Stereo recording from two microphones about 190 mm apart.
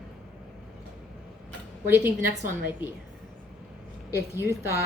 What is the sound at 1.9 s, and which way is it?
Speech, 10° right (ahead or behind).